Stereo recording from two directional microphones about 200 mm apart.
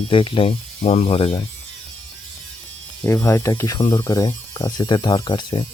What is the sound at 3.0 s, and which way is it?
Speech, 15° left (ahead or behind).